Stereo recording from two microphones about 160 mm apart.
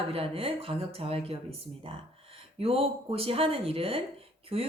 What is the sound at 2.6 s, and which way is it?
A woman's voice, 35° right (ahead or behind).